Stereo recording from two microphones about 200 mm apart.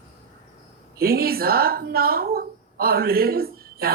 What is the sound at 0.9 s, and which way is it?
A woman's voice, 50° right (ahead or behind).